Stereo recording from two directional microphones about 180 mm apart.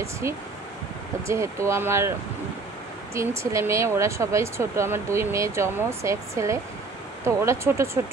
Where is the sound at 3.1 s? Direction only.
15° right (ahead or behind).